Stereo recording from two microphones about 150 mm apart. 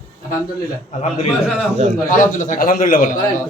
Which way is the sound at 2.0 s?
60° left (ahead or behind).